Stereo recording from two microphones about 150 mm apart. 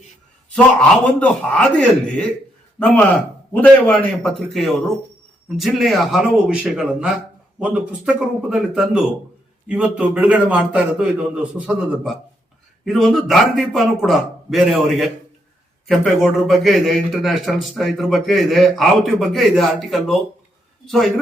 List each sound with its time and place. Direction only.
0.5 s a man's voice: 5° left (ahead or behind)
5.5 s a man's voice: centre (ahead or behind)